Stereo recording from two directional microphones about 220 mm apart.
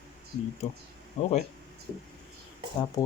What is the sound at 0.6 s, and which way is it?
Speech, 30° left (ahead or behind).